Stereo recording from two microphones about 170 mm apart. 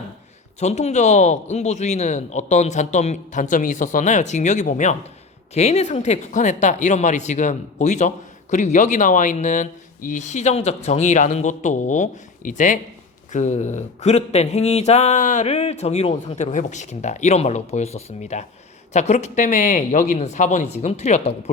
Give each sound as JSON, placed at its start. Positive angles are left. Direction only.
{"t": 0.6, "sound": "a woman's voice", "side_deg": 40}